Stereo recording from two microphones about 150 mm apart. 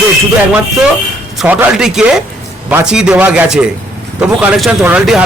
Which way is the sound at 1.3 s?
10° right (ahead or behind).